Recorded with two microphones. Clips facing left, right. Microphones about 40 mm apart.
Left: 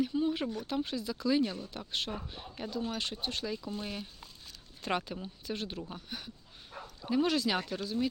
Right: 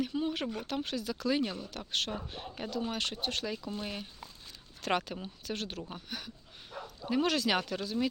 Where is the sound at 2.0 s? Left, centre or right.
Right.